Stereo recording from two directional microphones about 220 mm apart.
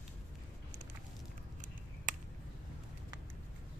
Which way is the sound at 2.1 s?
35° right (ahead or behind).